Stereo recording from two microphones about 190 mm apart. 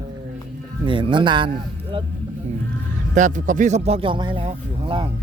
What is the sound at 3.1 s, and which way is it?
Speech, 40° right (ahead or behind).